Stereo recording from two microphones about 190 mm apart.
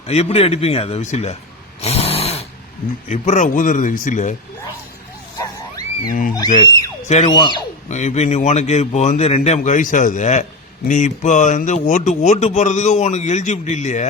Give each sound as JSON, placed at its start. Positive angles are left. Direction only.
{"t": 0.1, "sound": "a man's voice", "side_deg": 35}
{"t": 1.8, "sound": "snoring", "side_deg": 35}
{"t": 3.1, "sound": "a man's voice", "side_deg": 40}
{"t": 6.1, "sound": "wild animals", "side_deg": 45}
{"t": 6.6, "sound": "speech", "side_deg": 20}
{"t": 7.9, "sound": "a man's voice", "side_deg": 35}